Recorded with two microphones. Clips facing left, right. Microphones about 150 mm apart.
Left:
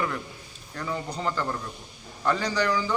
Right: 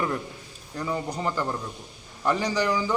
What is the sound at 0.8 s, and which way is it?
A man's voice, 15° right (ahead or behind).